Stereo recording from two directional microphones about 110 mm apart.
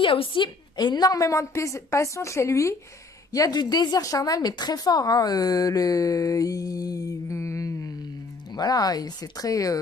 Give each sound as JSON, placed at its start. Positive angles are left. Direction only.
{"t": 0.0, "sound": "a woman's voice", "side_deg": 50}